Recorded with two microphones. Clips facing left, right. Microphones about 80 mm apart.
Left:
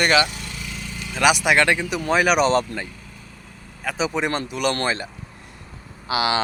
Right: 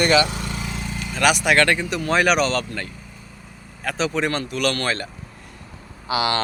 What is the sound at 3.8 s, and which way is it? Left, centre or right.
Speech, centre.